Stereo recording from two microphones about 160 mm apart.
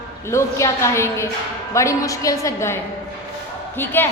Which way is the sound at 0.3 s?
15° left (ahead or behind).